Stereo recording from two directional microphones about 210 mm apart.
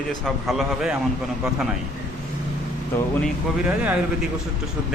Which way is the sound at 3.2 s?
5° right (ahead or behind).